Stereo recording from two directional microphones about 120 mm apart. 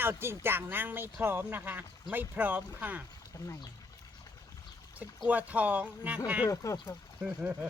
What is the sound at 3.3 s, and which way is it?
Speech, 30° left (ahead or behind).